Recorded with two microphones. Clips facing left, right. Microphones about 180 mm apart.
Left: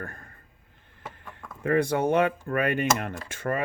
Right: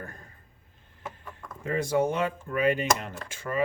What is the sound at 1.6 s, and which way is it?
Speech, 60° left (ahead or behind).